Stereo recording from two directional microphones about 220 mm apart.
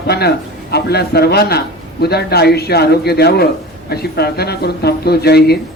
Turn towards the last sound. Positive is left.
turn(degrees=45)  # may be behind; listen again after turning